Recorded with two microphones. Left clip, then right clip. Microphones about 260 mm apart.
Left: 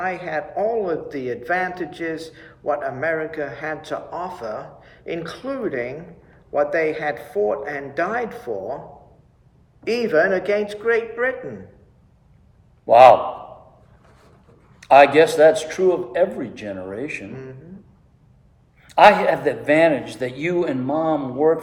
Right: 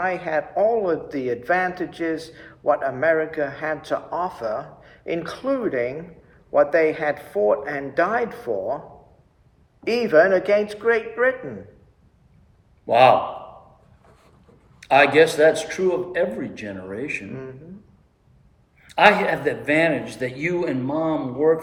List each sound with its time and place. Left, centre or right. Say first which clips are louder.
0.0 s a man's voice: right 2 dB; centre
9.8 s a man's voice: right 2 dB; centre
12.8 s a man's voice: left 5 dB; centre
14.8 s a man's voice: left 3 dB; centre
18.8 s a man's voice: left 3 dB; centre